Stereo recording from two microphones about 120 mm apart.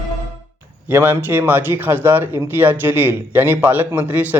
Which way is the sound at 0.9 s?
20° right (ahead or behind).